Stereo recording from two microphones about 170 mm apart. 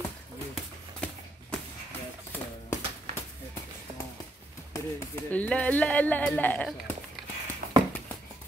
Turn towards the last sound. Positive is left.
turn(degrees=-65)  # may be behind; listen again after turning